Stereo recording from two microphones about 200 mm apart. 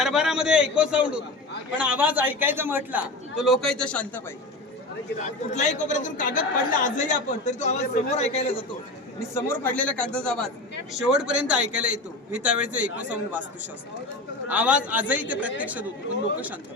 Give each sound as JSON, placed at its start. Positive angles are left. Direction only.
{"t": 0.0, "sound": "a man's voice", "side_deg": 0}
{"t": 5.2, "sound": "a man's voice", "side_deg": 35}
{"t": 9.3, "sound": "a man's voice", "side_deg": 10}